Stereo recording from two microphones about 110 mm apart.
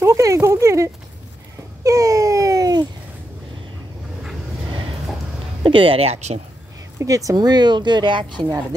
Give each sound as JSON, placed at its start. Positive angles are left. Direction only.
{"t": 0.0, "sound": "a sound", "side_deg": -30}
{"t": 5.6, "sound": "speech", "side_deg": -50}
{"t": 7.0, "sound": "speech", "side_deg": -30}